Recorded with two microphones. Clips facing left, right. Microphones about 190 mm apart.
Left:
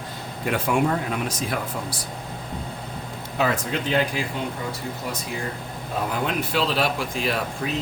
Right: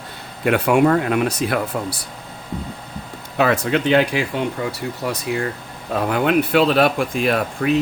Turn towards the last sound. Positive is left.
turn(degrees=-55)  # may be behind; listen again after turning